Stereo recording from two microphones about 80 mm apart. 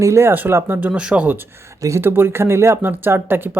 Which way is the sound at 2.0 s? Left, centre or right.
Right.